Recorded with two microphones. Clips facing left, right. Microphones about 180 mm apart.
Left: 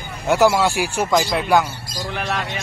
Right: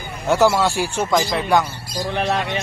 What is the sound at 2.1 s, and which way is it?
Speech, 30° right (ahead or behind).